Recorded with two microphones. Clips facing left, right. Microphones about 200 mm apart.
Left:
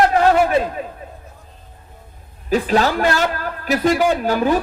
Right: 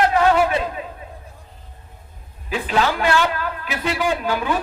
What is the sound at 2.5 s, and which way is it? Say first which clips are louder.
A man's voice: left 4 dB; 40° left (ahead or behind).